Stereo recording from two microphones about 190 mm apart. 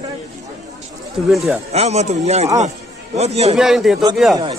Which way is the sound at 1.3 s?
Centre (ahead or behind).